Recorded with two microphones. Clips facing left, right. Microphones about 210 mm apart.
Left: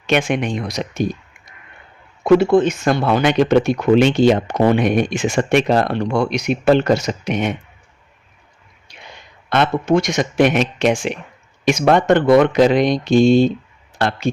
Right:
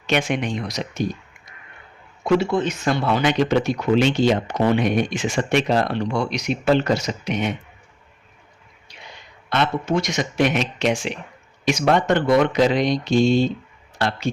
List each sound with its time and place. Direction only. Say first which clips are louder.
0.1 s speech: left 4 dB; 55° left (ahead or behind)
2.2 s speech: left 7 dB; 55° left (ahead or behind)
9.5 s speech: left 5 dB; 50° left (ahead or behind)